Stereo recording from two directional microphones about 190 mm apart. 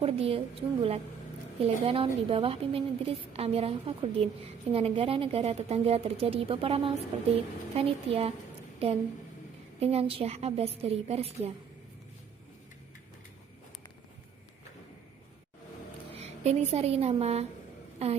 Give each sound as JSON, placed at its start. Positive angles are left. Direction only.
{"t": 0.0, "sound": "a woman's voice", "side_deg": -30}
{"t": 16.2, "sound": "a woman's voice", "side_deg": -35}